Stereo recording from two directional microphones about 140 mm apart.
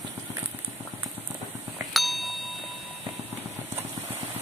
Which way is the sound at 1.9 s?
Centre (ahead or behind).